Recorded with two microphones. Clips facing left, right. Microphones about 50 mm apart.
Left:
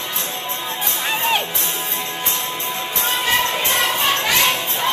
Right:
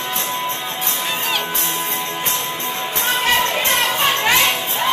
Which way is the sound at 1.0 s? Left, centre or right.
Left.